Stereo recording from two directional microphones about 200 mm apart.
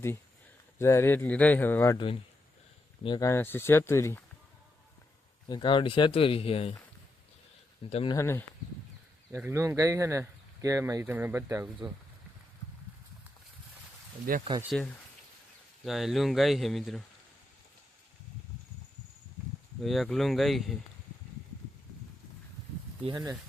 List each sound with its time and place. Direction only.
0.8 s speech: 15° left (ahead or behind)
5.5 s speech: 25° left (ahead or behind)
7.9 s speech: 30° left (ahead or behind)
8.1 s speech: 15° left (ahead or behind)
9.3 s speech: 10° right (ahead or behind)
14.3 s speech: 45° right (ahead or behind)
14.6 s speech: centre (ahead or behind)
19.8 s speech: centre (ahead or behind)
23.0 s speech: 20° right (ahead or behind)